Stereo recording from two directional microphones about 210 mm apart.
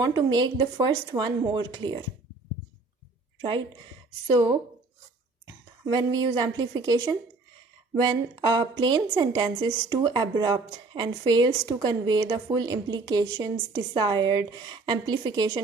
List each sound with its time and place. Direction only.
0.3 s a woman's voice: 20° right (ahead or behind)
5.8 s a woman's voice: 20° right (ahead or behind)